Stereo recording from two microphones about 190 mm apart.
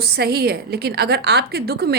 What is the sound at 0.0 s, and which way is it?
A woman's voice, 55° right (ahead or behind).